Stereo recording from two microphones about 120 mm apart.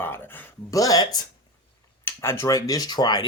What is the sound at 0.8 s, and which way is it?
Speech, 30° left (ahead or behind).